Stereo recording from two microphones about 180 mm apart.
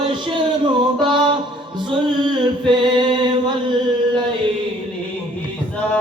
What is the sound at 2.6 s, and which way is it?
Singing, 25° right (ahead or behind).